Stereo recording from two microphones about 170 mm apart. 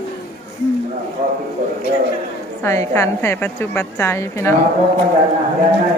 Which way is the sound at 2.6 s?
15° left (ahead or behind).